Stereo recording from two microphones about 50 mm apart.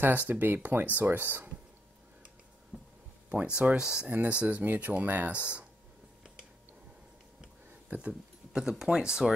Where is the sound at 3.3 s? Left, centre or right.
Right.